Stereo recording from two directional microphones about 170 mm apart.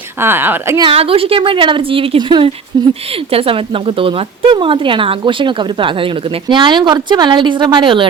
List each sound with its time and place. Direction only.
0.2 s a woman's voice: 15° right (ahead or behind)
0.8 s speech: 30° right (ahead or behind)